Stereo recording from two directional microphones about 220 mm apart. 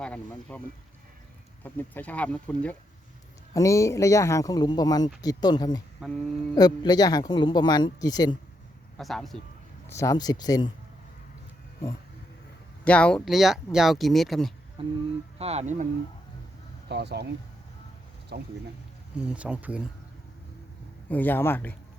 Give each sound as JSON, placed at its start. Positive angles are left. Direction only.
{"t": 0.0, "sound": "speech", "side_deg": 5}
{"t": 1.6, "sound": "a man's voice", "side_deg": 10}
{"t": 6.0, "sound": "speech", "side_deg": 5}
{"t": 6.6, "sound": "a man's voice", "side_deg": 20}
{"t": 9.0, "sound": "speech", "side_deg": 0}
{"t": 9.9, "sound": "a man's voice", "side_deg": 15}
{"t": 12.8, "sound": "speech", "side_deg": 5}
{"t": 14.8, "sound": "speech", "side_deg": -25}
{"t": 16.9, "sound": "speech", "side_deg": -50}
{"t": 18.3, "sound": "speech", "side_deg": -50}
{"t": 19.1, "sound": "speech", "side_deg": -5}
{"t": 21.1, "sound": "a man's voice", "side_deg": 10}